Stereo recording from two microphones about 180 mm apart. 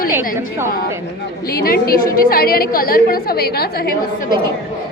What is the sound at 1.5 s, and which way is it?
A woman's voice, 60° left (ahead or behind).